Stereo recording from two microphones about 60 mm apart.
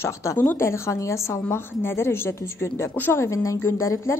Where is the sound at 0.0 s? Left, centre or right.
Left.